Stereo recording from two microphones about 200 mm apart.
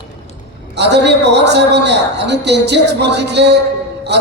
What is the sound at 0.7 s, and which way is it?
A man's voice, 60° right (ahead or behind).